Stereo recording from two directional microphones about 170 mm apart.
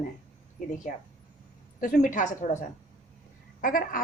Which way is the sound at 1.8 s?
50° left (ahead or behind).